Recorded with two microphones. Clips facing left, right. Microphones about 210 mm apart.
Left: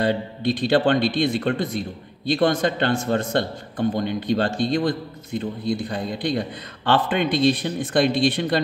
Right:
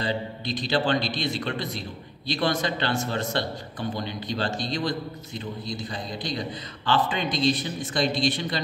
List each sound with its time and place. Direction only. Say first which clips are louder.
0.0 s a man's voice: left 7 dB; 60° left (ahead or behind)